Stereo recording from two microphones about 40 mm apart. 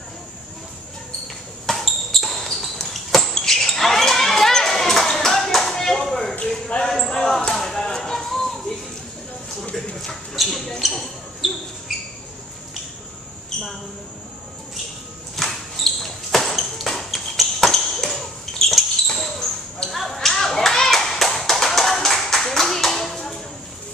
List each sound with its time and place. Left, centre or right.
1.2 s basketball bounce: centre
6.8 s a sound: centre
9.9 s mouse: centre
10.8 s basketball bounce: centre
15.3 s a sound: centre
17.7 s basketball bounce: centre
19.9 s clapping: centre